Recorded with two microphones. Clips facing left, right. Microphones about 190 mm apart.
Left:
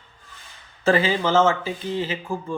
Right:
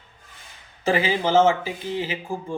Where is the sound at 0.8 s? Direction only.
15° right (ahead or behind).